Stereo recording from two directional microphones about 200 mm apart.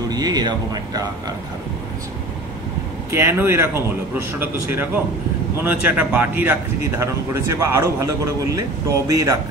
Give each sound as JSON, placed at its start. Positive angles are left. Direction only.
{"t": 0.1, "sound": "speech", "side_deg": -20}
{"t": 3.1, "sound": "speech", "side_deg": -10}